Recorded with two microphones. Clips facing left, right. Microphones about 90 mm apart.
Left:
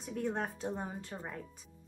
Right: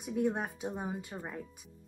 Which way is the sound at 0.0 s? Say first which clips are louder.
Right 4 dB; 10° right (ahead or behind).